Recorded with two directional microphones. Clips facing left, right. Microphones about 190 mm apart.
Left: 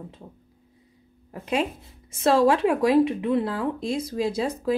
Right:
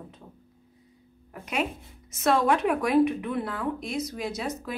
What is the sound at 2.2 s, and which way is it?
A woman's voice, 30° left (ahead or behind).